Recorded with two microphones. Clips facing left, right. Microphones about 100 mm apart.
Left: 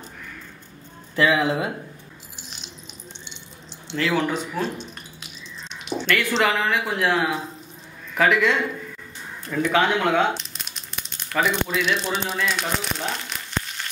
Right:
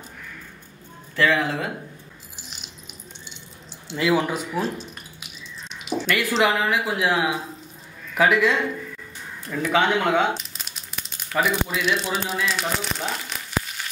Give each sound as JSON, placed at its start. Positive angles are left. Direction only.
{"t": 1.1, "sound": "speech", "side_deg": 15}
{"t": 3.9, "sound": "speech", "side_deg": -10}